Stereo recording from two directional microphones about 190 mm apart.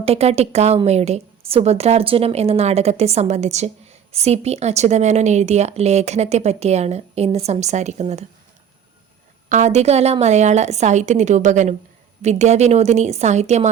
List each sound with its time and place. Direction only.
0.0 s a woman's voice: 30° right (ahead or behind)
9.5 s a woman's voice: 40° right (ahead or behind)